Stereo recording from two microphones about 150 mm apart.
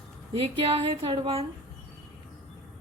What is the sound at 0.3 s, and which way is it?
A woman's voice, 40° right (ahead or behind).